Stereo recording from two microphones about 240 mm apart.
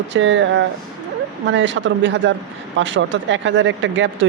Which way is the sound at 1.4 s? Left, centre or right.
Right.